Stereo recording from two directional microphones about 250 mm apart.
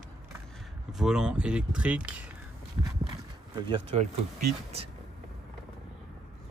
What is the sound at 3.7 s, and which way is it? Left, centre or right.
Speech, right.